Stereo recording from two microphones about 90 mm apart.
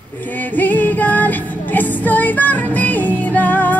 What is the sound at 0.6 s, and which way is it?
Female singing, 20° left (ahead or behind).